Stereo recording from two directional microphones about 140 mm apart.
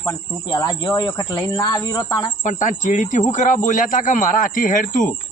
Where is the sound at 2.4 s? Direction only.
65° left (ahead or behind).